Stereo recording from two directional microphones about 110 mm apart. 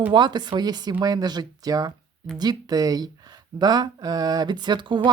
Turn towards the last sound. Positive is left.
turn(degrees=-45)  # may be behind; listen again after turning